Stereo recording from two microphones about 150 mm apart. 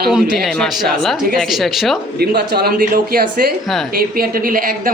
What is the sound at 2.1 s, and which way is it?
A woman's voice, 90° right.